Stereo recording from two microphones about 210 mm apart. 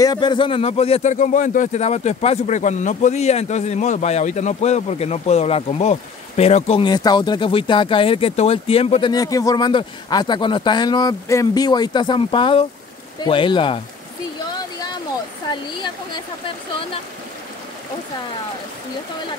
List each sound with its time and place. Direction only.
0.0 s speech: 20° left (ahead or behind)